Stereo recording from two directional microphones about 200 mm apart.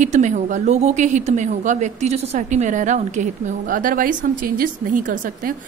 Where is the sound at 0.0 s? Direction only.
35° right (ahead or behind).